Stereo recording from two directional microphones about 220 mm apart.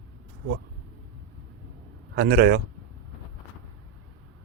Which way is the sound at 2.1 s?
45° right (ahead or behind).